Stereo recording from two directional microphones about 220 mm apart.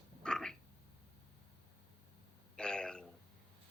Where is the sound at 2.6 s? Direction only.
5° left (ahead or behind).